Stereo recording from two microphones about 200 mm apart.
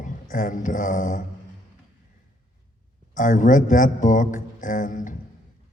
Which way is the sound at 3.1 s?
40° left (ahead or behind).